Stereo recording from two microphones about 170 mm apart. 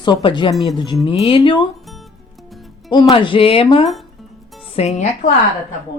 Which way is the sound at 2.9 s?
30° left (ahead or behind).